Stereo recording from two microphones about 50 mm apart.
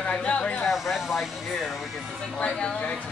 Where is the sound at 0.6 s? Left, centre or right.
Centre.